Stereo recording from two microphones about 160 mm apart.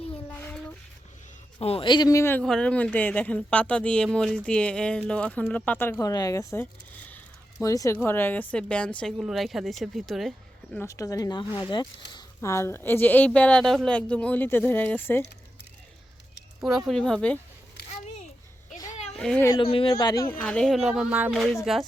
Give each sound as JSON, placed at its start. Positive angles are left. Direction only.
{"t": 0.3, "sound": "child singing", "side_deg": 10}
{"t": 1.5, "sound": "speech", "side_deg": 35}
{"t": 2.4, "sound": "speech", "side_deg": 5}
{"t": 10.8, "sound": "speech", "side_deg": 20}
{"t": 16.6, "sound": "speech", "side_deg": -5}
{"t": 18.9, "sound": "a sound", "side_deg": 45}
{"t": 19.1, "sound": "speech", "side_deg": 5}
{"t": 19.5, "sound": "speech", "side_deg": 35}
{"t": 20.4, "sound": "speech", "side_deg": 5}